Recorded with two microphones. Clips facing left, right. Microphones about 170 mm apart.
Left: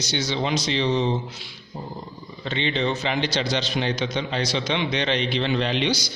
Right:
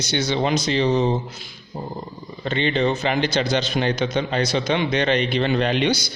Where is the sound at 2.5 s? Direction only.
50° right (ahead or behind).